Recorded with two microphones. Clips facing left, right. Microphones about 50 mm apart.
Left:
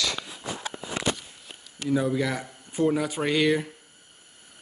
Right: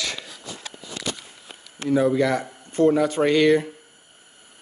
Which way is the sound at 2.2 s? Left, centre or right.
Centre.